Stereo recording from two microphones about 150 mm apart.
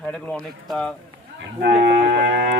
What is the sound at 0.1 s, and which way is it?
Speech, 5° left (ahead or behind).